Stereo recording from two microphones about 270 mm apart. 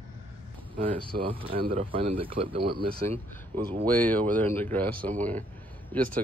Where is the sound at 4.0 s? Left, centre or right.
Centre.